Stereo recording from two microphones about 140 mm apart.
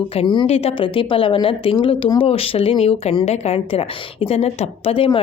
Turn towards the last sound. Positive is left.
turn(degrees=40)  # may be behind; listen again after turning